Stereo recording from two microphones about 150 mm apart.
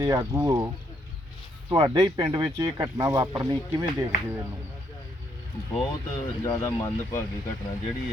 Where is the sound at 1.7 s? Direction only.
25° right (ahead or behind).